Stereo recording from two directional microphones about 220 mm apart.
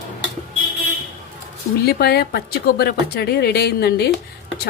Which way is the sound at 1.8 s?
45° left (ahead or behind).